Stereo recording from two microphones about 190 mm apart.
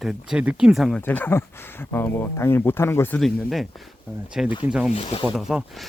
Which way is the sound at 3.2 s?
Centre (ahead or behind).